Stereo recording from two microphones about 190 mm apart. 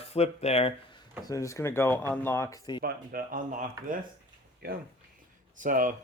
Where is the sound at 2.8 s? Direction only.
50° right (ahead or behind).